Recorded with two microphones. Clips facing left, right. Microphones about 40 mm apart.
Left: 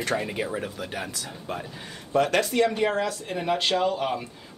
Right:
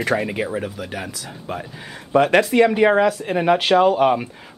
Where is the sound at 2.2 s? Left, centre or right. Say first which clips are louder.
Right 7 dB; right.